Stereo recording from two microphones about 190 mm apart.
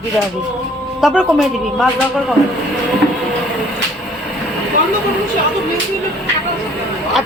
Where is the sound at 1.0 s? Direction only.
5° right (ahead or behind).